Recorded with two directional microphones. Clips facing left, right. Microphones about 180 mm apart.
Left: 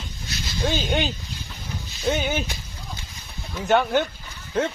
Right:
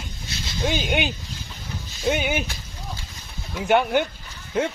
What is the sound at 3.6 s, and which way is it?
Speech, 15° right (ahead or behind).